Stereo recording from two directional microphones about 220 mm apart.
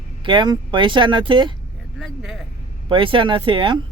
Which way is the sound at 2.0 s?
Centre (ahead or behind).